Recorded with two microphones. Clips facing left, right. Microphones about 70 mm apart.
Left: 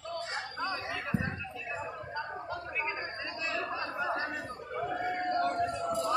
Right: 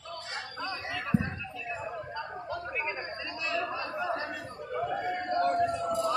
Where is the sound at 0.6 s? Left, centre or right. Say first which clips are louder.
Even; left.